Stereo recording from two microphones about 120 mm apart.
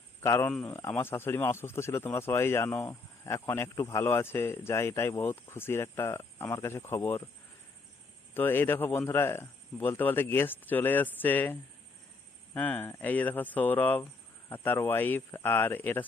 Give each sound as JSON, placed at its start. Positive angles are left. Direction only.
{"t": 0.2, "sound": "speech", "side_deg": 20}
{"t": 8.3, "sound": "speech", "side_deg": 20}
{"t": 12.5, "sound": "speech", "side_deg": 15}